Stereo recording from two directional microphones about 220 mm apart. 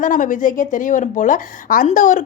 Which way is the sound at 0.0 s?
35° left (ahead or behind).